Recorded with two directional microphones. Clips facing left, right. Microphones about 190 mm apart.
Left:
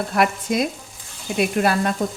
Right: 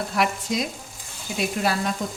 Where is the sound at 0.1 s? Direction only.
55° left (ahead or behind).